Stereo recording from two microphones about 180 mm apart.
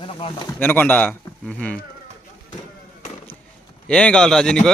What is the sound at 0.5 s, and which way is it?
Speech, 10° left (ahead or behind).